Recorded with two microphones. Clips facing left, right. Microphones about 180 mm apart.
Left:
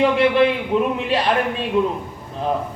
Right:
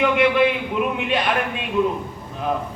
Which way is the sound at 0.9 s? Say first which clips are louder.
Left 2 dB; 35° left (ahead or behind).